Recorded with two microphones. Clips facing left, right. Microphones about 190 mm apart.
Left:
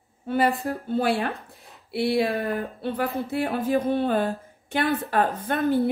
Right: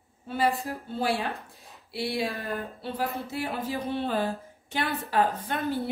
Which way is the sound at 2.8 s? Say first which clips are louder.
Left 5 dB; 55° left (ahead or behind).